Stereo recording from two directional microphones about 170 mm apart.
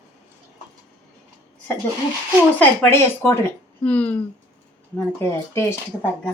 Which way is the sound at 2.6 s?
10° left (ahead or behind).